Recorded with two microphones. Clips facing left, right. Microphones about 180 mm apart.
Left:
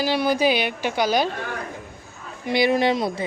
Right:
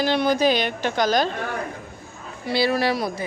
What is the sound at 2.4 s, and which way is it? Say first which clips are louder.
Speech: left 2 dB; 20° left (ahead or behind).